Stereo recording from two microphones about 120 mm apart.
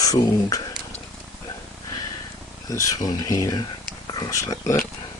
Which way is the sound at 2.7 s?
25° left (ahead or behind).